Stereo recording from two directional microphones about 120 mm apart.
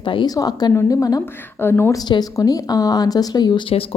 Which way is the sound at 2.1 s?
35° left (ahead or behind).